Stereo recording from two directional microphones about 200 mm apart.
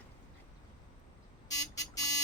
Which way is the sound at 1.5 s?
20° left (ahead or behind).